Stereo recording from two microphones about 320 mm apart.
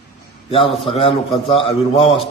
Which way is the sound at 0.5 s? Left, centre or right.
Centre.